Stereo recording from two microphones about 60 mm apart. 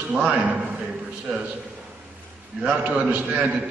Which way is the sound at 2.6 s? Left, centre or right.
Right.